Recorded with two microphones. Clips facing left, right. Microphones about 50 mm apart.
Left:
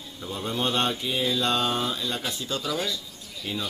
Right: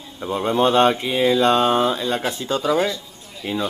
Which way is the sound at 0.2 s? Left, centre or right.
Right.